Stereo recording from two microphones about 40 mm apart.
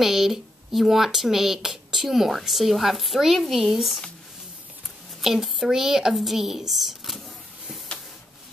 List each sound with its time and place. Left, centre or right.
0.0 s speech: centre
5.2 s speech: centre